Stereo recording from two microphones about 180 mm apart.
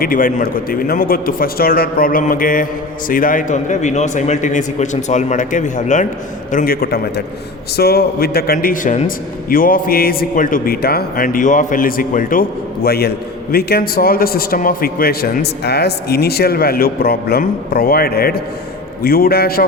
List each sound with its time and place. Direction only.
0.0 s a man's voice: 50° left (ahead or behind)